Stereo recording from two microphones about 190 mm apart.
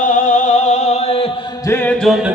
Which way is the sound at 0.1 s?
40° left (ahead or behind).